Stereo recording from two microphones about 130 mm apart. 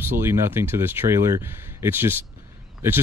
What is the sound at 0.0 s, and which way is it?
Speech, 20° right (ahead or behind).